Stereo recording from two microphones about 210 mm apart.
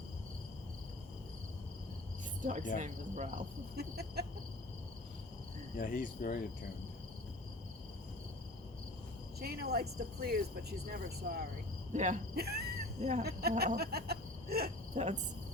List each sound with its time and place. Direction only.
2.4 s cricket: 40° right (ahead or behind)
5.7 s cricket: 40° left (ahead or behind)
9.4 s speech: 50° right (ahead or behind)
11.9 s speech: 35° right (ahead or behind)
13.0 s cricket: 35° right (ahead or behind)
13.2 s cricket: 50° right (ahead or behind)
14.9 s cricket: 35° right (ahead or behind)